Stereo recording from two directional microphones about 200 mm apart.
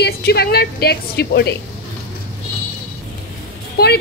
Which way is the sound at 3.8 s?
50° left (ahead or behind).